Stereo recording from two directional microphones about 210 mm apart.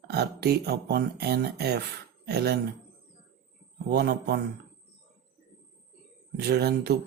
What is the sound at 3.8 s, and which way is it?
Speech, 50° right (ahead or behind).